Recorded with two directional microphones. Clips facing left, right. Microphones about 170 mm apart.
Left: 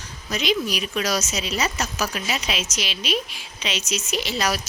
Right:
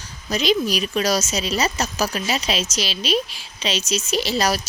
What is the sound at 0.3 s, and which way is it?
Speech, 35° right (ahead or behind).